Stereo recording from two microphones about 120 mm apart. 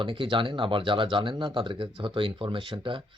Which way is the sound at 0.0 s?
45° right (ahead or behind).